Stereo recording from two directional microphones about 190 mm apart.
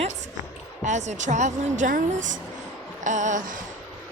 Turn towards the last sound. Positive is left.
turn(degrees=-45)  # may be behind; listen again after turning